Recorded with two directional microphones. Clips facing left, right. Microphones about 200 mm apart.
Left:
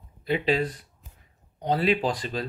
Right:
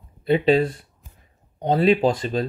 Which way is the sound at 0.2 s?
30° right (ahead or behind).